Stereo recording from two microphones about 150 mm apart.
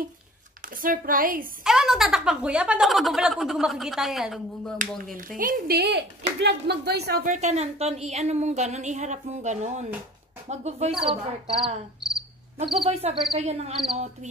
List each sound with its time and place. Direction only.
0.8 s a woman's voice: 70° right (ahead or behind)
1.6 s speech: 5° right (ahead or behind)
5.4 s speech: 80° right
7.3 s a woman's voice: 50° right (ahead or behind)
11.5 s speech: centre (ahead or behind)
12.7 s cricket: 35° right (ahead or behind)
13.4 s a woman's voice: 45° right (ahead or behind)